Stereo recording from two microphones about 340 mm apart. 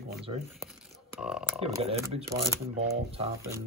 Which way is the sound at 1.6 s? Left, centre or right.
Centre.